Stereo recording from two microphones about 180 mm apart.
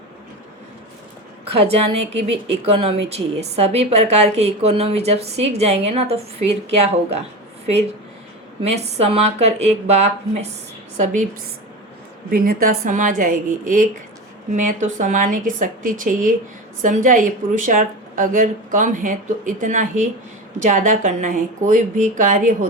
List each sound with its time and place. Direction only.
1.5 s a woman's voice: 35° right (ahead or behind)
8.6 s a woman's voice: 35° right (ahead or behind)
12.3 s speech: 55° right (ahead or behind)